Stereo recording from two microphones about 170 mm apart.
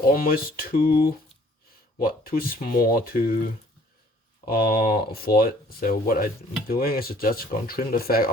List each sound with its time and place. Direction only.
0.1 s speech: 60° left (ahead or behind)
4.4 s speech: 60° left (ahead or behind)